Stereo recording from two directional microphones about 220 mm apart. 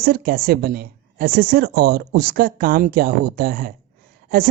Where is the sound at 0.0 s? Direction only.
45° right (ahead or behind).